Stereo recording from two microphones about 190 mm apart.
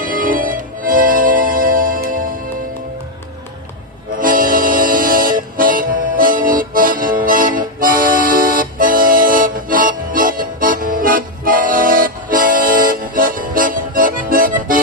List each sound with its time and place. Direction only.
0.0 s music: 45° right (ahead or behind)
4.2 s music: 45° right (ahead or behind)